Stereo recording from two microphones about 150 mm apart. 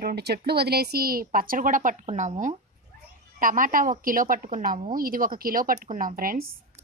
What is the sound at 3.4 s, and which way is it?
A woman's voice, 65° right (ahead or behind).